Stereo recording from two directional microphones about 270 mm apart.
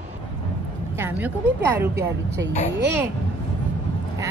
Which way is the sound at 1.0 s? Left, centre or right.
Centre.